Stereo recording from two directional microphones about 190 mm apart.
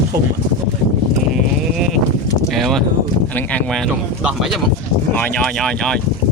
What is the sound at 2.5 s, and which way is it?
Speech, centre (ahead or behind).